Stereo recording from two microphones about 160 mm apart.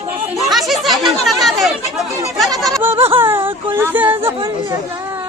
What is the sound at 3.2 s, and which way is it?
Speech, 15° right (ahead or behind).